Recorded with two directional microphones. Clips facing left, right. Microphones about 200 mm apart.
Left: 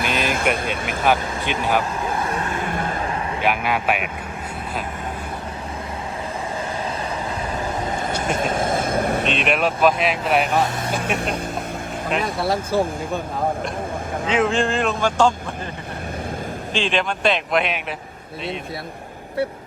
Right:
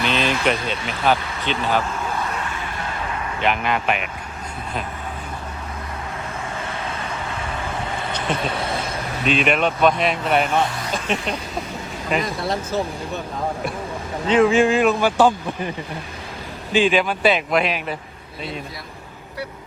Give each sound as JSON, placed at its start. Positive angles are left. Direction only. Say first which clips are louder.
{"t": 0.0, "sound": "vehicle", "louder": "right 1 dB", "side_deg": 50}
{"t": 0.5, "sound": "speech", "louder": "left 1 dB", "side_deg": 50}
{"t": 1.4, "sound": "speech", "louder": "even", "side_deg": 10}
{"t": 2.5, "sound": "vehicle", "louder": "left 5 dB", "side_deg": 50}
{"t": 3.4, "sound": "speech", "louder": "right 1 dB", "side_deg": 5}
{"t": 7.6, "sound": "vehicle", "louder": "left 4 dB", "side_deg": 40}
{"t": 9.2, "sound": "speech", "louder": "right 1 dB", "side_deg": 0}
{"t": 11.2, "sound": "speech", "louder": "left 2 dB", "side_deg": 50}
{"t": 12.0, "sound": "speech", "louder": "left 1 dB", "side_deg": 0}
{"t": 14.3, "sound": "speech", "louder": "right 5 dB", "side_deg": 0}
{"t": 16.7, "sound": "speech", "louder": "right 5 dB", "side_deg": -5}